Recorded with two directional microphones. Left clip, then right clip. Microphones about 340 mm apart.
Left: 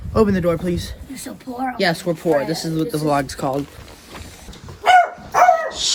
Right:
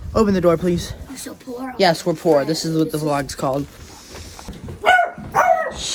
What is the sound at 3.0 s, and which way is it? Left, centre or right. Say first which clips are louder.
Speech: left 2 dB; centre.